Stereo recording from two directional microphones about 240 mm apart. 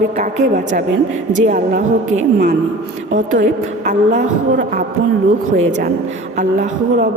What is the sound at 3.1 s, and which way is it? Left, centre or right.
A woman's voice, right.